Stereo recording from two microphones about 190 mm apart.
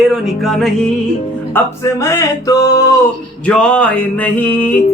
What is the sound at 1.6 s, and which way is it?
Music, 15° left (ahead or behind).